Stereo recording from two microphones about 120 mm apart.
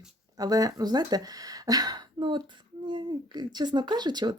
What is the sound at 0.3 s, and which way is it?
Speech, 30° right (ahead or behind).